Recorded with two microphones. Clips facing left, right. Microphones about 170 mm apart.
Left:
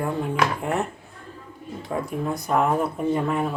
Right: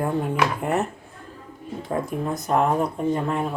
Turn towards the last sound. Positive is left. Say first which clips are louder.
# even
turn(degrees=5)  # may be behind; listen again after turning